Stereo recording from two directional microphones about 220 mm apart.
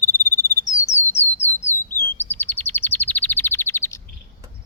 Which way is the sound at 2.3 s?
10° left (ahead or behind).